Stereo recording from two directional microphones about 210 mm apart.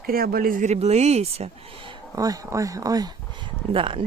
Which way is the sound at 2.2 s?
15° right (ahead or behind).